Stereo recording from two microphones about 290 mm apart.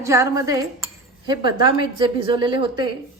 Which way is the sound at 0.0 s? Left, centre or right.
Centre.